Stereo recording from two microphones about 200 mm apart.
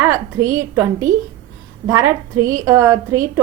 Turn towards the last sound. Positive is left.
turn(degrees=-15)  # may be behind; listen again after turning